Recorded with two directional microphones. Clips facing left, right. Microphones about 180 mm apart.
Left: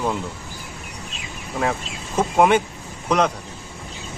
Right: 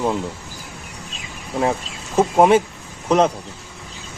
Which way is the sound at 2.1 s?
25° right (ahead or behind).